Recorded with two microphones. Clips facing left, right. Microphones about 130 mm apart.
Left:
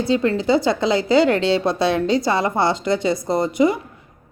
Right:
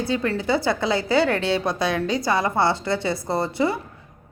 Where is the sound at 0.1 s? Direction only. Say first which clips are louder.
Left 6 dB; 25° left (ahead or behind).